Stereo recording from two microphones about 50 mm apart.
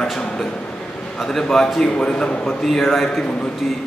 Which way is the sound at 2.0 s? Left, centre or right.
Left.